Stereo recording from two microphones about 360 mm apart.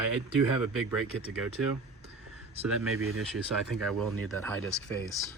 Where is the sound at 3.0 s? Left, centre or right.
Right.